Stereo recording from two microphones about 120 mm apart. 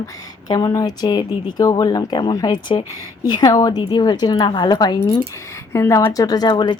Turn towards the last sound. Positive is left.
turn(degrees=35)  # may be behind; listen again after turning